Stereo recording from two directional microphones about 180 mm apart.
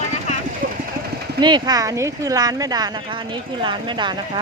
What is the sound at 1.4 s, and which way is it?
Speech, 25° right (ahead or behind).